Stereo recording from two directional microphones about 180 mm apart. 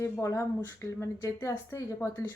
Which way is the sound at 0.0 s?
15° left (ahead or behind).